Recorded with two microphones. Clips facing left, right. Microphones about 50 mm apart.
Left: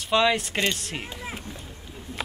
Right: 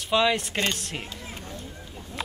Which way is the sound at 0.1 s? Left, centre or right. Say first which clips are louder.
Left 1 dB; centre.